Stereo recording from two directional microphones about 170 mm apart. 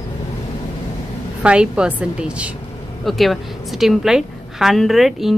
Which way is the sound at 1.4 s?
5° right (ahead or behind).